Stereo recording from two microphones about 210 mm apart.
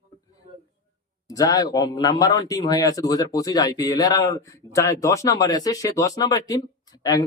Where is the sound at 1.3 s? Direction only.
15° left (ahead or behind).